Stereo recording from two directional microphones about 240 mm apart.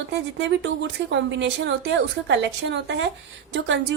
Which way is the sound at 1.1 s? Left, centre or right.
Right.